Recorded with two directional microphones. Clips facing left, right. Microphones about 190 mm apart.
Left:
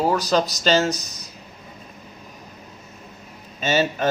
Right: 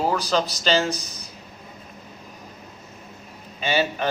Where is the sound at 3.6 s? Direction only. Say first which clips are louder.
Left 2 dB; 45° left (ahead or behind).